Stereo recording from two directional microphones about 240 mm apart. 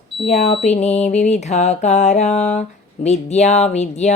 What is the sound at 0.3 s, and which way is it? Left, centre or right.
Speech, left.